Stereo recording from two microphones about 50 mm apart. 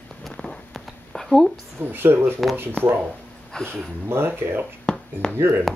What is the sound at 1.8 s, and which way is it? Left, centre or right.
Speech, right.